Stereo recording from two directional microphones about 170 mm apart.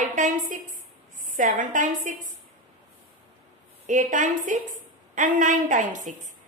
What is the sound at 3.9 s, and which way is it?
A woman's voice, 50° right (ahead or behind).